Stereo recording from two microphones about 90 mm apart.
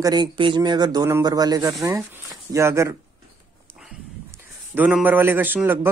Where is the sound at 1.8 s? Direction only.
30° right (ahead or behind).